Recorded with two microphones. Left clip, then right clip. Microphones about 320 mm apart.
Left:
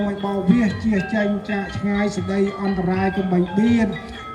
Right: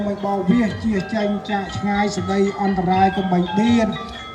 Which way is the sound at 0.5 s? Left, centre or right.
Centre.